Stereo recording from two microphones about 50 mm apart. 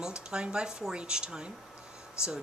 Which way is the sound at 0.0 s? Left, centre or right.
Centre.